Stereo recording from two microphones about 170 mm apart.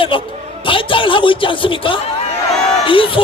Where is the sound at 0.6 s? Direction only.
30° left (ahead or behind).